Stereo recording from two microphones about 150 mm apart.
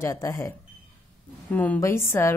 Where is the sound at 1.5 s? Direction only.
10° left (ahead or behind).